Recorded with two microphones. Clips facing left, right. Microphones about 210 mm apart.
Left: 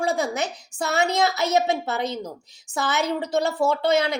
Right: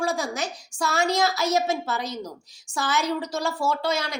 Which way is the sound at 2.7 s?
20° left (ahead or behind).